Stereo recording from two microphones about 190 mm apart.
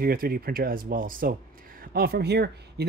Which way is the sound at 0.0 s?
50° right (ahead or behind).